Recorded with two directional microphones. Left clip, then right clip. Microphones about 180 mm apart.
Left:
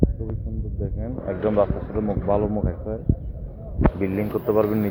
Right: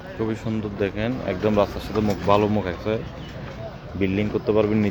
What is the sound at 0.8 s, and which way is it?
Speech, 40° right (ahead or behind).